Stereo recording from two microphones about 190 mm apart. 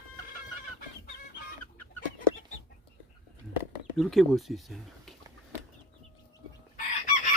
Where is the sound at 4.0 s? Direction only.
Centre (ahead or behind).